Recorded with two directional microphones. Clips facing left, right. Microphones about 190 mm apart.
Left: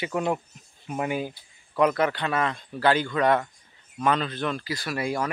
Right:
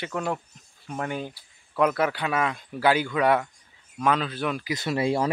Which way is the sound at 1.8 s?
5° right (ahead or behind).